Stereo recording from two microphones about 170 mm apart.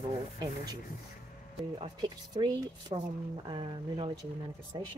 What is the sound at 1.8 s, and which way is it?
Speech, 30° right (ahead or behind).